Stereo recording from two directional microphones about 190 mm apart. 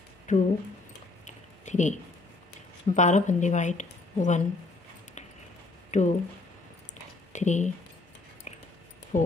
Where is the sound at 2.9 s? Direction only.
40° left (ahead or behind).